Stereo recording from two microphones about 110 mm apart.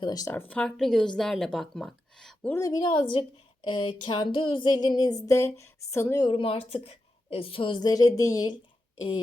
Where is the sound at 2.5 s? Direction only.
35° left (ahead or behind).